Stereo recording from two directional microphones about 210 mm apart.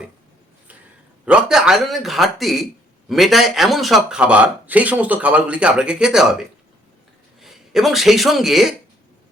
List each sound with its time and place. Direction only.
1.2 s speech: 5° right (ahead or behind)
7.4 s speech: centre (ahead or behind)